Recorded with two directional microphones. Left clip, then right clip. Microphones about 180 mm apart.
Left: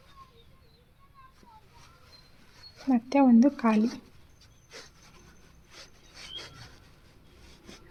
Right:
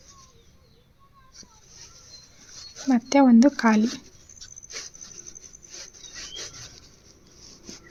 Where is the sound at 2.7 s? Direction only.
25° right (ahead or behind).